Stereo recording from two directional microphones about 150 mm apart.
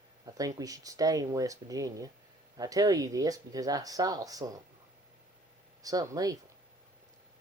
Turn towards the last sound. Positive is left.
turn(degrees=-25)  # may be behind; listen again after turning